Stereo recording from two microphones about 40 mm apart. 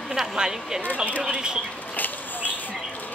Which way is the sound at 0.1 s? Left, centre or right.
Centre.